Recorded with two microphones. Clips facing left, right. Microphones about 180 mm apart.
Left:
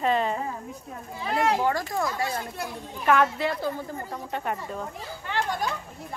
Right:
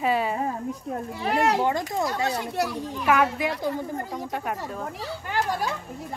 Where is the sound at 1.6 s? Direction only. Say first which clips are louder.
Right 1 dB; 20° right (ahead or behind).